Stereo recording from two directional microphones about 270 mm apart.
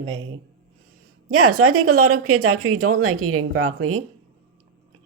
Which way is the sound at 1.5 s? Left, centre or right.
Right.